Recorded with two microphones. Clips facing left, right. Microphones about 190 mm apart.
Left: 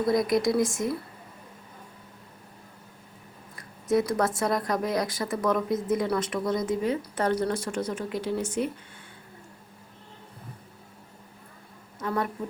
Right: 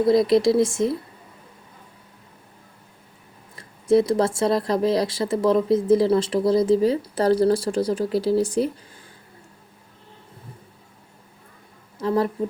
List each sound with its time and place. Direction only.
0.1 s speech: 30° right (ahead or behind)
3.5 s speech: 25° right (ahead or behind)
11.9 s speech: 30° right (ahead or behind)